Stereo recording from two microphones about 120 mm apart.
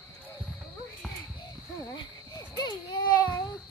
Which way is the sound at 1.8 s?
35° left (ahead or behind).